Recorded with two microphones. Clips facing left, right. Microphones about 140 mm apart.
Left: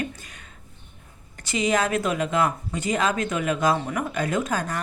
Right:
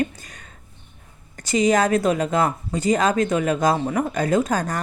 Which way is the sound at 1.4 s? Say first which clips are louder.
Right 5 dB; 40° right (ahead or behind).